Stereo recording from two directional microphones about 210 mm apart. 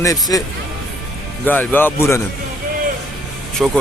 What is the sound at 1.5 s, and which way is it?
Speech, 10° left (ahead or behind).